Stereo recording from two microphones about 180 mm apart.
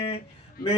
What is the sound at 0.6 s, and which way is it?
Speech, 55° left (ahead or behind).